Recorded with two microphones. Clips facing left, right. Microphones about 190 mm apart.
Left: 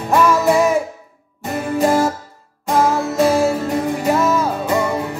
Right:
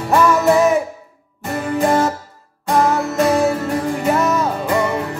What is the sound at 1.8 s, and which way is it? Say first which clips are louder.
Music: left 1 dB; centre (ahead or behind).